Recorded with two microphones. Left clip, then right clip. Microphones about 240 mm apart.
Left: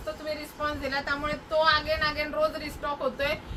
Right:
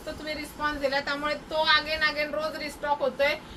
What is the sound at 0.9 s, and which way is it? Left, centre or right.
A woman's voice, centre.